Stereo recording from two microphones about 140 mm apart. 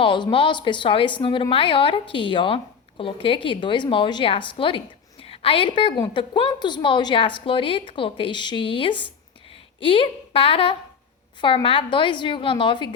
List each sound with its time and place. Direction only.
0.0 s a woman's voice: 35° left (ahead or behind)